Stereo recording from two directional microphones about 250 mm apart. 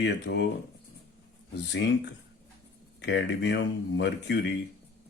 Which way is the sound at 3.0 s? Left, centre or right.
Left.